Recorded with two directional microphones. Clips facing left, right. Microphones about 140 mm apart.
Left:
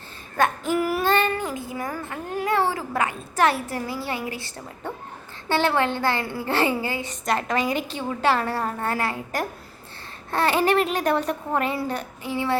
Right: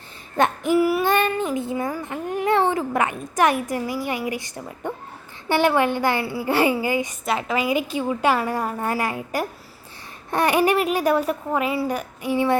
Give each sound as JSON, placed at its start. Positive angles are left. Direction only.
{"t": 0.3, "sound": "child singing", "side_deg": -20}
{"t": 5.5, "sound": "a woman's voice", "side_deg": -15}
{"t": 7.3, "sound": "a woman's voice", "side_deg": -5}